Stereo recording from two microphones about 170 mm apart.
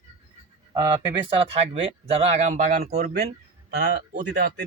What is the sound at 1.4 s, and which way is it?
Speech, 35° right (ahead or behind).